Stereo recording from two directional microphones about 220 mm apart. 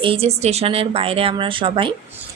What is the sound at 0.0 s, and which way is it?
Speech, 25° right (ahead or behind).